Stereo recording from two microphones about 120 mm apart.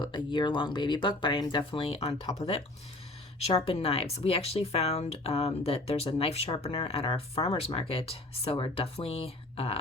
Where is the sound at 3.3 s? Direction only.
55° left (ahead or behind).